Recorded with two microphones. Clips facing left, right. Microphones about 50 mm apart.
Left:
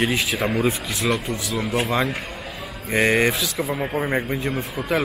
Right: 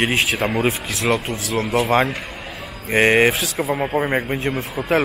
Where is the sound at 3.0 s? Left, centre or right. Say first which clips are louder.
Right 4 dB; right.